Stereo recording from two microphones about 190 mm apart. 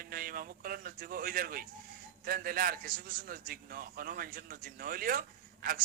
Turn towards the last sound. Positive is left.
turn(degrees=-45)  # may be behind; listen again after turning